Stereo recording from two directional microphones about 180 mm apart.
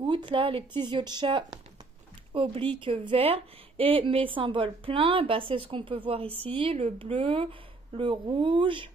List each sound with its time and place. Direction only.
0.0 s a woman's voice: 25° right (ahead or behind)